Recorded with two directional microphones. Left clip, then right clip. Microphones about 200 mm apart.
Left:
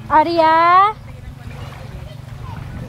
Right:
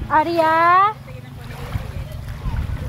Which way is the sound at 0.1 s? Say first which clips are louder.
Left 4 dB; 55° left (ahead or behind).